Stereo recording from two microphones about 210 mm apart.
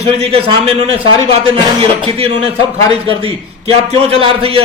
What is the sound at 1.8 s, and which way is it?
Speech, 25° right (ahead or behind).